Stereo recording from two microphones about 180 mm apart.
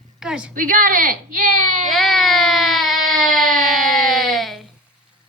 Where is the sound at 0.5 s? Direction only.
50° right (ahead or behind).